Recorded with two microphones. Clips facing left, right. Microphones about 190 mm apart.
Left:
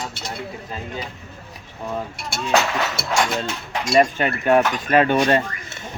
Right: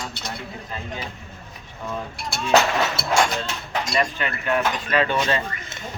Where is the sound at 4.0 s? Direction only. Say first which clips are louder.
Left 9 dB; 45° left (ahead or behind).